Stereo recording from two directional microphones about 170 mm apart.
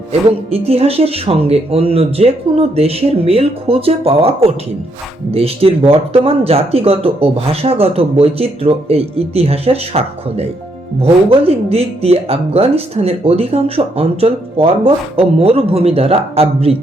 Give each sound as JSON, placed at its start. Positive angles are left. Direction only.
{"t": 0.1, "sound": "speech", "side_deg": -35}